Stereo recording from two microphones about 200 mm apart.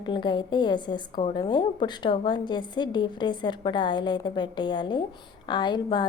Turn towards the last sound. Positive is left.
turn(degrees=20)  # may be behind; listen again after turning